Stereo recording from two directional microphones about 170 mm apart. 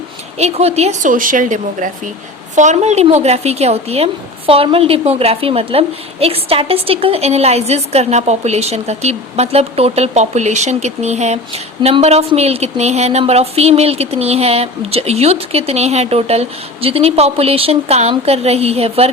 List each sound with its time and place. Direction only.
0.3 s a woman's voice: 40° right (ahead or behind)